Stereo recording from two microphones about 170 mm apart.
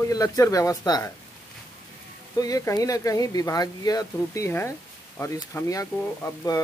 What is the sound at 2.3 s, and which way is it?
Speech, 20° left (ahead or behind).